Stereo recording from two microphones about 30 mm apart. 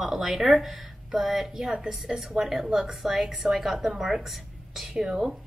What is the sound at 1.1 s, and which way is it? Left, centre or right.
A woman's voice, centre.